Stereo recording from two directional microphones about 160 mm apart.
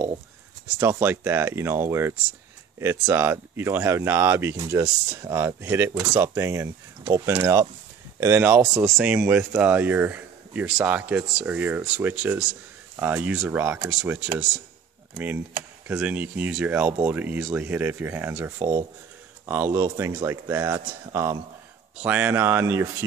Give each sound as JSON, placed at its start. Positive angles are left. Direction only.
{"t": 0.7, "sound": "speech", "side_deg": -15}